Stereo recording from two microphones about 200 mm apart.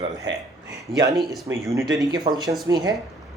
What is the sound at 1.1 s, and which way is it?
Speech, centre (ahead or behind).